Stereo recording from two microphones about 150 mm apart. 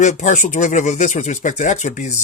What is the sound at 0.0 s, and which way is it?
Speech, 50° left (ahead or behind).